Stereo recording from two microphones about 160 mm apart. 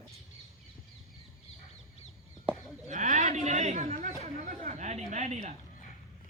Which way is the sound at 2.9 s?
50° right (ahead or behind).